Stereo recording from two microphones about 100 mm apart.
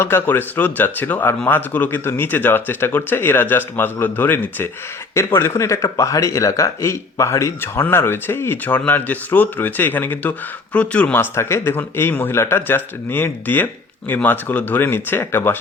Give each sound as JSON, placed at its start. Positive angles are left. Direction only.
{"t": 0.0, "sound": "speech", "side_deg": 20}